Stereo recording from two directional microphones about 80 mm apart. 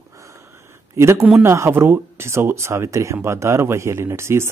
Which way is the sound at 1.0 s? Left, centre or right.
Right.